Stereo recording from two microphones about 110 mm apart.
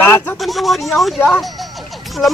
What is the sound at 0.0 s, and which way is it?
Speech, 20° left (ahead or behind).